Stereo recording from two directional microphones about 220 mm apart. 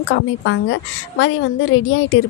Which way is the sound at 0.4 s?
60° left (ahead or behind).